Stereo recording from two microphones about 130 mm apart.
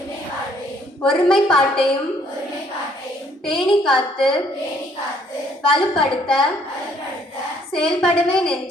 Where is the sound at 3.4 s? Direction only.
5° left (ahead or behind).